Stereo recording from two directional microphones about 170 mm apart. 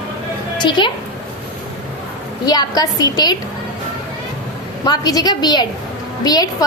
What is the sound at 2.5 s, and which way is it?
Speech, 25° left (ahead or behind).